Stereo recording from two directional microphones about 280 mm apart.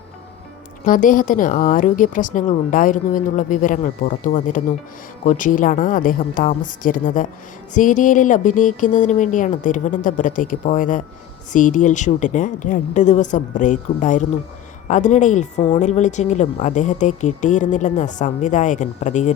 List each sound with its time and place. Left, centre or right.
0.9 s a woman's voice: left